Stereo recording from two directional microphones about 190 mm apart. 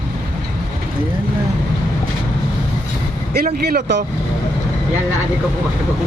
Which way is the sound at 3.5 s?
55° right (ahead or behind).